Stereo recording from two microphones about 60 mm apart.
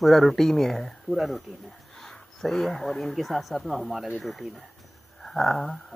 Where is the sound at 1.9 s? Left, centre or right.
Centre.